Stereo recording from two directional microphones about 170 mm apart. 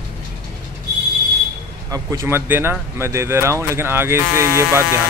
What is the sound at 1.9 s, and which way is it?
Speech, 20° right (ahead or behind).